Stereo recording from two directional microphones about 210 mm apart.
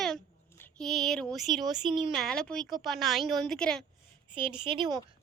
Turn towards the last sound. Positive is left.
turn(degrees=-25)  # may be behind; listen again after turning